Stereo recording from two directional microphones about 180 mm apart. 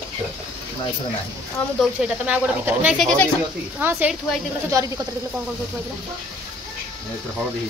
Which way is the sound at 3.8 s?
10° right (ahead or behind).